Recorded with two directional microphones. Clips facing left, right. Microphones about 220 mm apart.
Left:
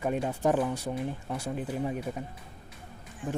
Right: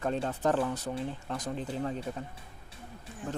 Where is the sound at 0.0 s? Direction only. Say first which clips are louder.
Left 2 dB; 10° left (ahead or behind).